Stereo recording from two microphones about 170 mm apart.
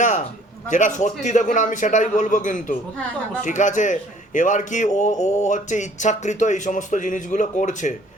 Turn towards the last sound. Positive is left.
turn(degrees=45)  # may be behind; listen again after turning